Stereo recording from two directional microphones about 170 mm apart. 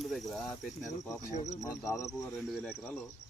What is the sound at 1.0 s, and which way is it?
Speech, 15° left (ahead or behind).